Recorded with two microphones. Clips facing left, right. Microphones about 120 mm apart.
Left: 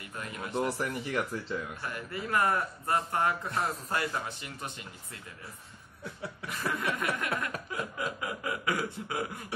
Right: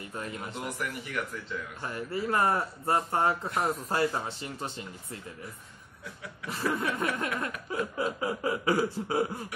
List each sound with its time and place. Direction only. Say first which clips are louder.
0.1 s a man's voice: right 3 dB; 30° right (ahead or behind)
0.5 s speech: left 4 dB; 30° left (ahead or behind)
1.8 s a man's voice: right 4 dB; 30° right (ahead or behind)
6.4 s a man's voice: right 3 dB; 30° right (ahead or behind)
7.7 s a sound: right 8 dB; 30° right (ahead or behind)